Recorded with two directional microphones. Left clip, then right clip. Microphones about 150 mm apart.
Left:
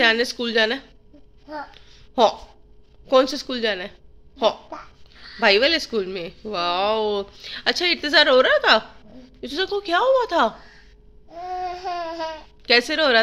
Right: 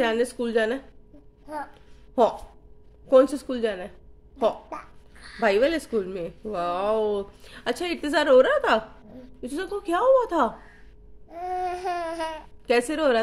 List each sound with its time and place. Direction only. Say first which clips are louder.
0.0 s a woman's voice: left 5 dB; 5° right (ahead or behind)
1.7 s a sound: left 5 dB; 5° right (ahead or behind)
3.1 s a woman's voice: even; 10° right (ahead or behind)
5.4 s a woman's voice: left 4 dB; 5° right (ahead or behind)
11.2 s babbling: even; 20° right (ahead or behind)
12.9 s a woman's voice: left 4 dB; 5° right (ahead or behind)